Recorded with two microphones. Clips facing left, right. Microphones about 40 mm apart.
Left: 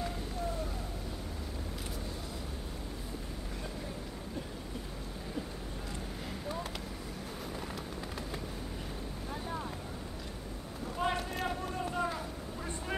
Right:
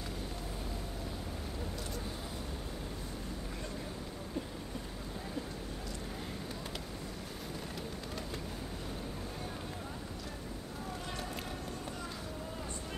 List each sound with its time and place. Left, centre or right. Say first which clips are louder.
11.0 s run: left 8 dB; left